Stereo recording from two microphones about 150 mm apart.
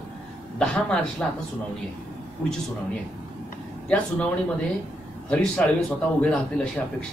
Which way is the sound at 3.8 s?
5° left (ahead or behind).